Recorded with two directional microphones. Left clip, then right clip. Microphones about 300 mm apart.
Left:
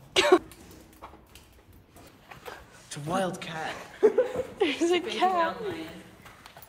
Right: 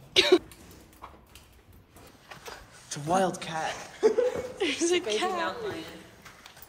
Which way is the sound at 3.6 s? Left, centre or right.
Centre.